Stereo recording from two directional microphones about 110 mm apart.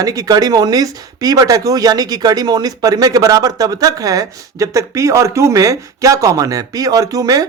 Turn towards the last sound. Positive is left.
turn(degrees=-35)  # may be behind; listen again after turning